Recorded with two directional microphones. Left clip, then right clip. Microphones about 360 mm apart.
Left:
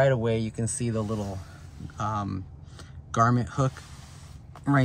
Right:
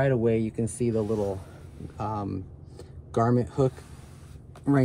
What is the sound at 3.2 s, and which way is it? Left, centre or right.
Speech, left.